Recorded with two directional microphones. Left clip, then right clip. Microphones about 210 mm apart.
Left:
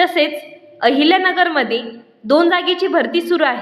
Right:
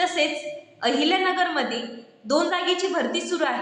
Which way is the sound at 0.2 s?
40° left (ahead or behind).